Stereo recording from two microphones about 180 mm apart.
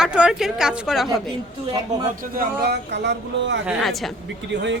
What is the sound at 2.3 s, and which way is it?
Speech, 60° right (ahead or behind).